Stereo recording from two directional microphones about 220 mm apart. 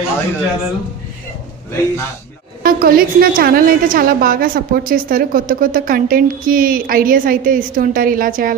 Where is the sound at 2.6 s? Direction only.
40° right (ahead or behind).